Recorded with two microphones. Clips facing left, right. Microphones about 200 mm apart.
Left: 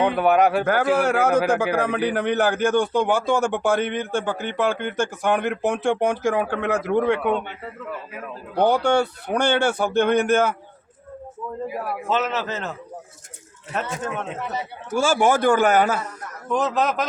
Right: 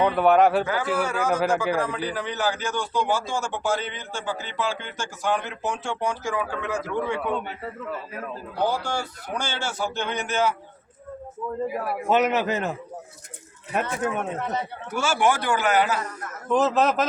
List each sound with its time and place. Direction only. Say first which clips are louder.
0.2 s a man's voice: right 1 dB; centre (ahead or behind)
0.6 s a man's voice: left 6 dB; 70° left (ahead or behind)
8.5 s a man's voice: left 8 dB; 65° left (ahead or behind)
11.7 s a man's voice: even; centre (ahead or behind)
12.0 s a man's voice: right 4 dB; 15° right (ahead or behind)
13.7 s a man's voice: right 1 dB; 15° right (ahead or behind)
14.3 s speech: right 1 dB; 5° left (ahead or behind)
15.3 s a man's voice: left 5 dB; 50° left (ahead or behind)
16.5 s a man's voice: right 1 dB; centre (ahead or behind)